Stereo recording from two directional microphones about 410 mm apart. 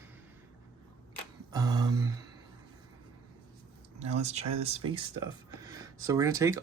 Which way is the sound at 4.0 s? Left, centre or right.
Centre.